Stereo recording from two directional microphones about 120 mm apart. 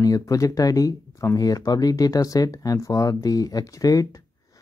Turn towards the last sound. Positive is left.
turn(degrees=30)  # may be behind; listen again after turning